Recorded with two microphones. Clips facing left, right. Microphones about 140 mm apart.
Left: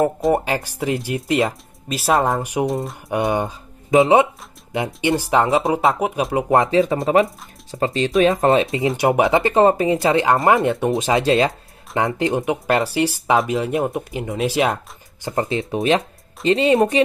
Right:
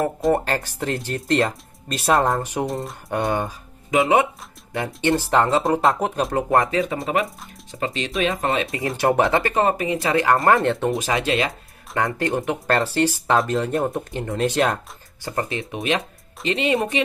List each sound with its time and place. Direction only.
0.3 s speech: 10° left (ahead or behind)
3.3 s speech: 20° left (ahead or behind)
4.7 s speech: 15° left (ahead or behind)
5.6 s speech: centre (ahead or behind)
6.5 s speech: 25° left (ahead or behind)
8.9 s speech: 15° left (ahead or behind)
10.5 s speech: 10° left (ahead or behind)
11.0 s speech: 25° left (ahead or behind); by 14.8 s 5° left (ahead or behind)
15.2 s speech: 25° left (ahead or behind)